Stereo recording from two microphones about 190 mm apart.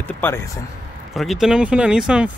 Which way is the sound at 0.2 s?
10° left (ahead or behind).